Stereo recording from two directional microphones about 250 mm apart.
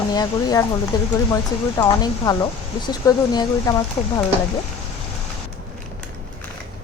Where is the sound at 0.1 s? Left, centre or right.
Centre.